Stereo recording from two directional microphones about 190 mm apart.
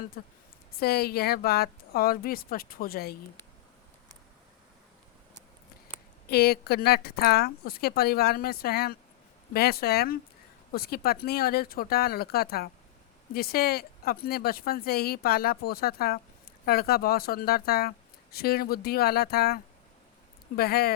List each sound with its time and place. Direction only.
0.8 s speech: 55° left (ahead or behind)
6.2 s speech: 55° left (ahead or behind)